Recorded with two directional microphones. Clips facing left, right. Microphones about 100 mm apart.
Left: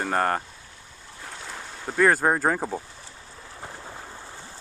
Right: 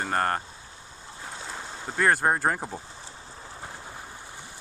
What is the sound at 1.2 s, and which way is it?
Boat, 20° right (ahead or behind).